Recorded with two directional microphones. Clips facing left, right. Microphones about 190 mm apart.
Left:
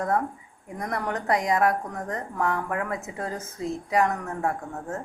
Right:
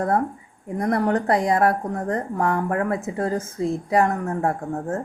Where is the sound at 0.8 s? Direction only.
30° right (ahead or behind).